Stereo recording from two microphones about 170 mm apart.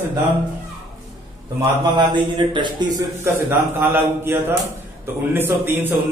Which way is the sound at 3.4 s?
15° right (ahead or behind).